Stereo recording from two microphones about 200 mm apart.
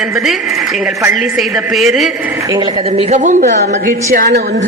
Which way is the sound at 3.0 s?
35° right (ahead or behind).